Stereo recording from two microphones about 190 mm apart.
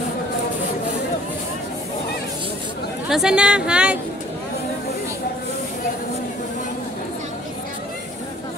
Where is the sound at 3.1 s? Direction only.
5° right (ahead or behind).